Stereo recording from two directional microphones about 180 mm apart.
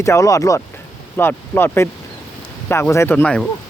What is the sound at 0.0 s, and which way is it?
Speech, 15° left (ahead or behind).